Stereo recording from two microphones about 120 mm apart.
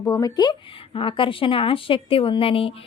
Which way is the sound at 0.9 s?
45° left (ahead or behind).